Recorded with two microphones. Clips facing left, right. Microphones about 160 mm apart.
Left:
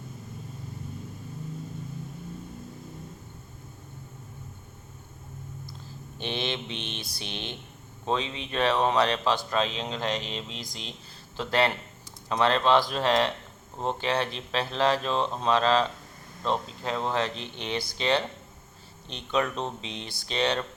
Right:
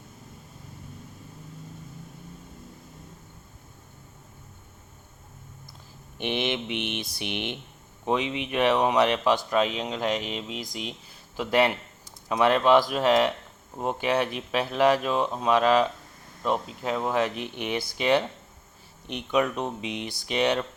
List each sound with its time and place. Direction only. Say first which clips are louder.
6.1 s speech: right 4 dB; 20° right (ahead or behind)